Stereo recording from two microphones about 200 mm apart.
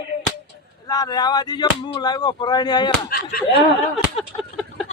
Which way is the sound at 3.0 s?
50° left (ahead or behind).